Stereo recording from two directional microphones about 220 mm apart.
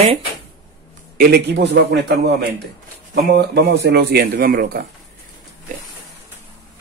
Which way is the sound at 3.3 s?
50° right (ahead or behind).